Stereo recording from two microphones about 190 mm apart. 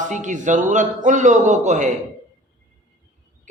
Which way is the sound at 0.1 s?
40° right (ahead or behind).